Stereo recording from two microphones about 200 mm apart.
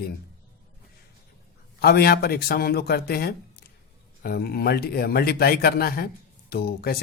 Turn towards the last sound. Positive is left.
turn(degrees=50)  # may be behind; listen again after turning